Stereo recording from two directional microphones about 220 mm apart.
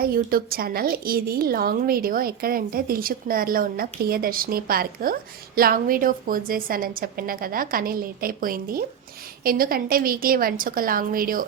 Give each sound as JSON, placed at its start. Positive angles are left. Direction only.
{"t": 0.0, "sound": "a woman's voice", "side_deg": -40}